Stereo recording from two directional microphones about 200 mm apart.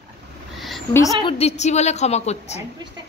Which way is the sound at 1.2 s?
30° left (ahead or behind).